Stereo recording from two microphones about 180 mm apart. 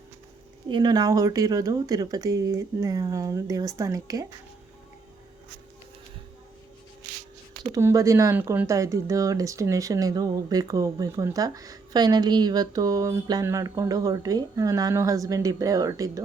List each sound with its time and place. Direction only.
0.7 s speech: 25° right (ahead or behind)
7.7 s speech: 15° right (ahead or behind)